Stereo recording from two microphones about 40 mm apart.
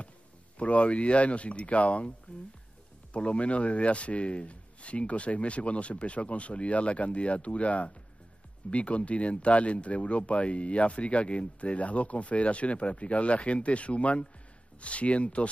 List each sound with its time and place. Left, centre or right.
0.6 s speech: left